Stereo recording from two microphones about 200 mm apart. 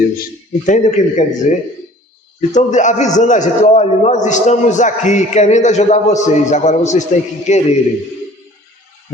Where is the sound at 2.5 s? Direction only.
35° left (ahead or behind).